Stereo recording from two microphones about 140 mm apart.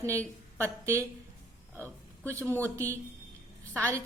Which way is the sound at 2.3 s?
20° right (ahead or behind).